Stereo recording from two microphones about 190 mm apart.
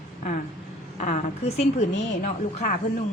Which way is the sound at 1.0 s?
35° left (ahead or behind).